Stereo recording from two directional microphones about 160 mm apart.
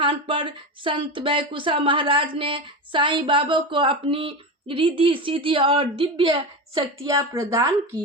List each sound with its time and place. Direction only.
0.0 s speech: 30° right (ahead or behind)
6.7 s a woman's voice: 20° right (ahead or behind)